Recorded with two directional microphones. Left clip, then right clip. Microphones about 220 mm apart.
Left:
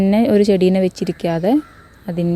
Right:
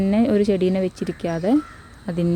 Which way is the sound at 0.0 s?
20° left (ahead or behind).